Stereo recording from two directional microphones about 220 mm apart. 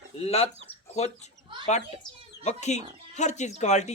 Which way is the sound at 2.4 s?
30° left (ahead or behind).